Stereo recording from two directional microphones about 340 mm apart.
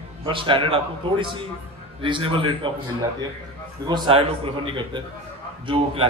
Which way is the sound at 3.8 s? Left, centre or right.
Centre.